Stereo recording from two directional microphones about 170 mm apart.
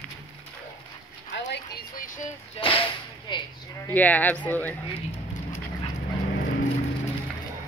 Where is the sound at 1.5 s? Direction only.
65° left (ahead or behind).